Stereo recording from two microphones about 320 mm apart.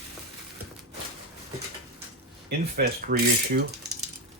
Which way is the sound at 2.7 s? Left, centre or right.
Right.